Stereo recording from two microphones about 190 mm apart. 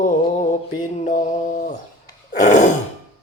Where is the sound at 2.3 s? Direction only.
40° left (ahead or behind).